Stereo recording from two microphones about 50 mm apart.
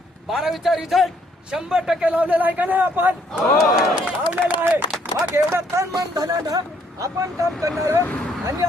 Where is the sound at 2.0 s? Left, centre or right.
Right.